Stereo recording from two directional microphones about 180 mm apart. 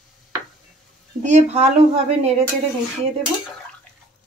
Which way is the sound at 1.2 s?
40° right (ahead or behind).